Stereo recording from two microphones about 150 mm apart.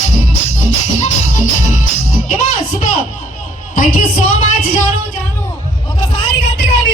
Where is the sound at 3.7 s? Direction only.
65° left (ahead or behind).